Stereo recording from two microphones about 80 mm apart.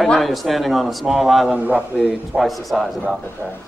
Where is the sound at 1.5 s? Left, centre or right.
Centre.